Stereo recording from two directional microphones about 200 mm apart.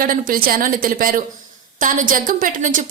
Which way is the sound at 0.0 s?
45° right (ahead or behind).